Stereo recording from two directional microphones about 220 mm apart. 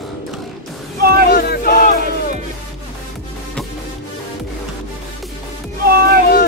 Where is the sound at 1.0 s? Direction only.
45° right (ahead or behind).